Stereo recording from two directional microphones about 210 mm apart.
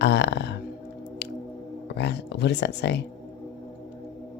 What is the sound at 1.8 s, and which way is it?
Speech, 55° left (ahead or behind).